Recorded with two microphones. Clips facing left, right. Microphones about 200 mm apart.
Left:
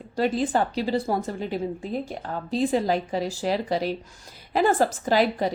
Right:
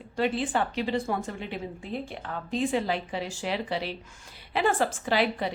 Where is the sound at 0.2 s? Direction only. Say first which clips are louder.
Left 4 dB; 40° left (ahead or behind).